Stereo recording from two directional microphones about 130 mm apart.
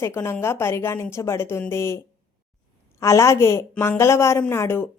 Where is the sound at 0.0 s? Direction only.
20° left (ahead or behind).